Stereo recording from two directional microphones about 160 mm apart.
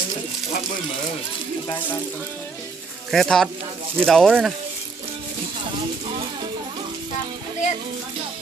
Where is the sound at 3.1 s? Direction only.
5° left (ahead or behind).